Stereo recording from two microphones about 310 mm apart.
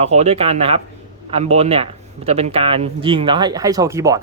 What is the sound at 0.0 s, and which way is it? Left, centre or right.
Speech, right.